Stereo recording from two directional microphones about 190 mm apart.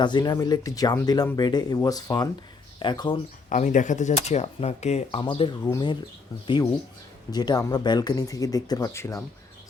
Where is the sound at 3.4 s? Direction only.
40° left (ahead or behind).